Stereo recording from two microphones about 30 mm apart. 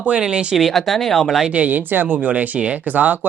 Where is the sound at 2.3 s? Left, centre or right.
Right.